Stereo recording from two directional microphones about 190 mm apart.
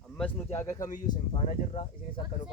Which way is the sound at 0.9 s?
45° left (ahead or behind).